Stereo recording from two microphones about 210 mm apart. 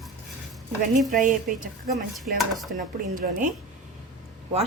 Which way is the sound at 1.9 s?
Centre (ahead or behind).